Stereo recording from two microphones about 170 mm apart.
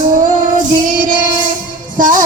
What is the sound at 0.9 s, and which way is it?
Child singing, 55° right (ahead or behind).